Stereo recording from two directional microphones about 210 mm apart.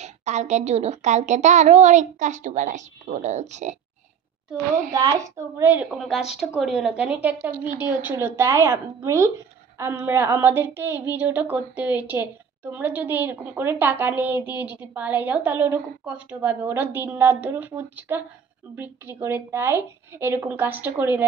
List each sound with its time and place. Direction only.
0.0 s a woman's voice: 35° right (ahead or behind)
4.9 s a woman's voice: 15° right (ahead or behind)